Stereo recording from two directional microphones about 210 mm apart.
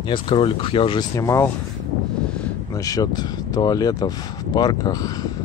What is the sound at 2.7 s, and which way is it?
Speech, 15° left (ahead or behind).